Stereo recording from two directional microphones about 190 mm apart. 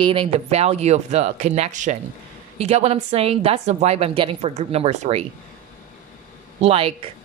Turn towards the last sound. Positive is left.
turn(degrees=-30)  # may be behind; listen again after turning